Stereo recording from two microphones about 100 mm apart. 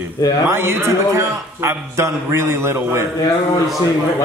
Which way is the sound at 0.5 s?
25° right (ahead or behind).